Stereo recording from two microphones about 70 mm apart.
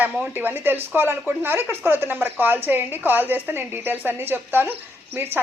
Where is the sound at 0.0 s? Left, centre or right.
Right.